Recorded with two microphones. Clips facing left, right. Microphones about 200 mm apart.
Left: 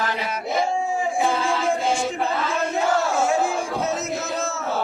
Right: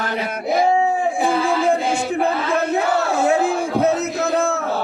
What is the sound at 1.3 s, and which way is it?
Battle cry, 60° right (ahead or behind).